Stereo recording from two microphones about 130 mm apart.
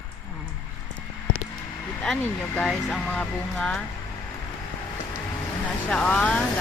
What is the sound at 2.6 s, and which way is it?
Speech, 10° left (ahead or behind).